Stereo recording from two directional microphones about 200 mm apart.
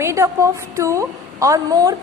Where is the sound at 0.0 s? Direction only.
15° right (ahead or behind).